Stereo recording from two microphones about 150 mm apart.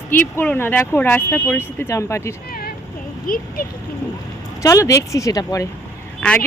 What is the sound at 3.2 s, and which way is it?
Speech, 70° left (ahead or behind).